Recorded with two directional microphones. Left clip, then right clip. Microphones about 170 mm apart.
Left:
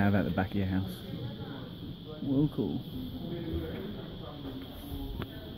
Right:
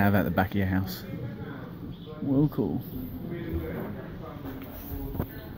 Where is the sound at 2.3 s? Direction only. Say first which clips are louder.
Right 4 dB; 15° right (ahead or behind).